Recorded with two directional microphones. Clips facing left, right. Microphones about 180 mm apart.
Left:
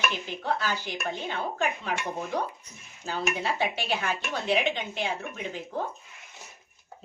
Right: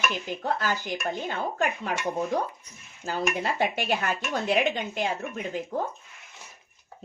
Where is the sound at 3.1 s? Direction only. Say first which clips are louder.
Right 2 dB; 45° right (ahead or behind).